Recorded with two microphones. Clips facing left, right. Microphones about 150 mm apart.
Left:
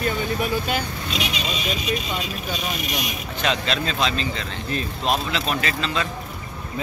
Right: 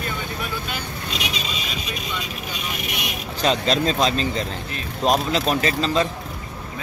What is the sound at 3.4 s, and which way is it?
Speech, 35° right (ahead or behind).